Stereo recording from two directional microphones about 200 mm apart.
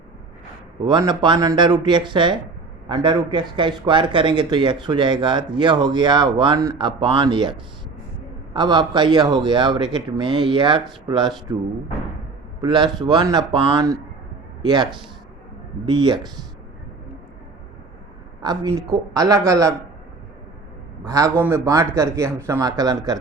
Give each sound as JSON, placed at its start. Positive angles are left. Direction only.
{"t": 0.9, "sound": "speech", "side_deg": -20}
{"t": 8.5, "sound": "speech", "side_deg": -20}
{"t": 15.9, "sound": "speech", "side_deg": -20}
{"t": 18.4, "sound": "speech", "side_deg": -20}
{"t": 21.3, "sound": "speech", "side_deg": -15}